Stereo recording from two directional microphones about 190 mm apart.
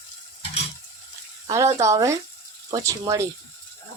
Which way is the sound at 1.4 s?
15° right (ahead or behind).